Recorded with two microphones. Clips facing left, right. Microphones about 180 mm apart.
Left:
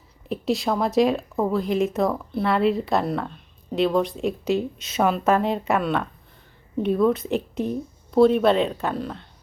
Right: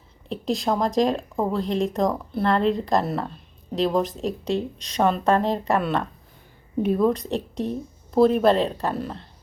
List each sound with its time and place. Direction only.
0.3 s speech: centre (ahead or behind)
4.2 s speech: 35° right (ahead or behind)
4.8 s speech: 5° left (ahead or behind)